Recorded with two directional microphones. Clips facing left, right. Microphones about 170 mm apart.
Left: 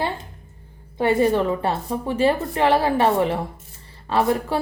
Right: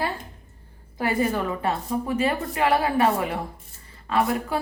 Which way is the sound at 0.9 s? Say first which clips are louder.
Left 6 dB; 25° left (ahead or behind).